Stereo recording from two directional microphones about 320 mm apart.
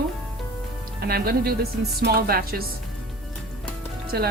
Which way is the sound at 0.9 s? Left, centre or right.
Right.